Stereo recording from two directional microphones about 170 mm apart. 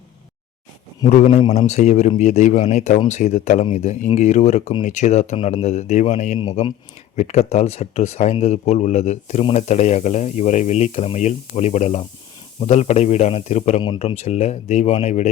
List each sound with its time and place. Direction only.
1.1 s a man's voice: 45° left (ahead or behind)